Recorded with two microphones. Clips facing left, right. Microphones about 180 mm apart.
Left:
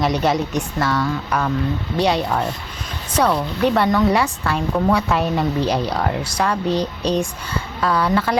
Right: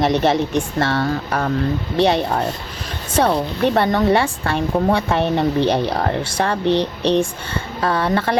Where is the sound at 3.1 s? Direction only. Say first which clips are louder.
Right 1 dB; 30° right (ahead or behind).